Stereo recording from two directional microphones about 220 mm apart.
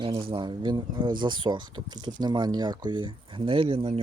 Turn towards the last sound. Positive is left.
turn(degrees=-25)  # may be behind; listen again after turning